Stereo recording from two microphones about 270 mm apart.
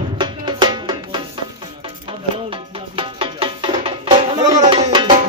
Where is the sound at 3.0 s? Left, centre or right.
Centre.